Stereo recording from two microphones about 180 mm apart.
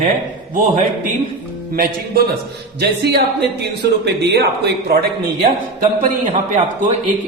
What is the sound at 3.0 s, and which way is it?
A man's voice, 65° right (ahead or behind).